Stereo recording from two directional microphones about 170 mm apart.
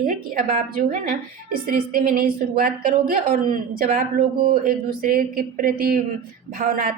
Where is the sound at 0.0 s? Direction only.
55° right (ahead or behind).